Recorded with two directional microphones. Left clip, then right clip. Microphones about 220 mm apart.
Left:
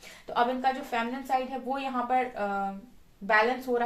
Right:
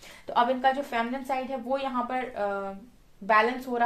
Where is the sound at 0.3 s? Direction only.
45° right (ahead or behind).